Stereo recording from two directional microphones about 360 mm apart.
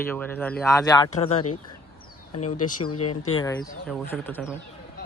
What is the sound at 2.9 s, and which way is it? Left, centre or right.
Speech, left.